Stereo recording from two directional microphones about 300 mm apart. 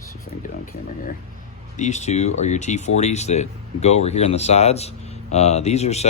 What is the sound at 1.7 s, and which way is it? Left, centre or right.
Speech, left.